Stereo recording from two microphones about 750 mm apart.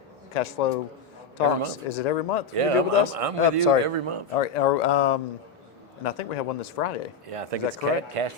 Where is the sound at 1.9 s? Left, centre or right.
Left.